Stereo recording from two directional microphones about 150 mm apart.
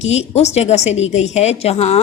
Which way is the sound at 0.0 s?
45° left (ahead or behind).